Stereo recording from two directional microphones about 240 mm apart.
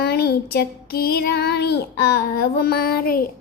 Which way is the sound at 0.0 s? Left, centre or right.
Left.